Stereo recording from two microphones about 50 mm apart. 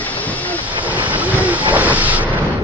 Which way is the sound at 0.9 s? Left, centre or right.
Right.